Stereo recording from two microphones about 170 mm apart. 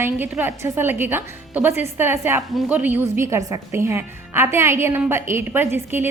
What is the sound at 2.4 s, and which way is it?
A woman's voice, 5° right (ahead or behind).